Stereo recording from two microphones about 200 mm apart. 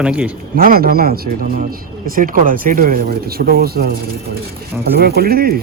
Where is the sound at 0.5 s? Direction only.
45° right (ahead or behind).